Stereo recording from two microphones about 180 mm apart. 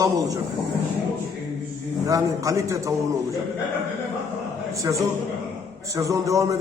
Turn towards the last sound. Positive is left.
turn(degrees=-15)  # may be behind; listen again after turning